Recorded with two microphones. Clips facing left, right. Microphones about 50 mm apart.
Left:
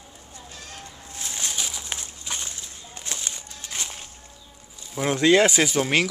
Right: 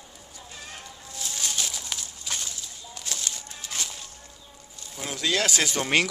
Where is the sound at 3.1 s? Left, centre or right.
Left.